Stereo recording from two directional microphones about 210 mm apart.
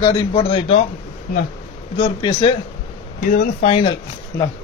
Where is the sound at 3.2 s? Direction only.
45° left (ahead or behind).